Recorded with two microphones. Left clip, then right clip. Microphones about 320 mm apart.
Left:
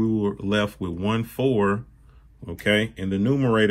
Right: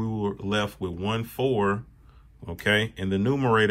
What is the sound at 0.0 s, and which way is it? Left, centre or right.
Speech, centre.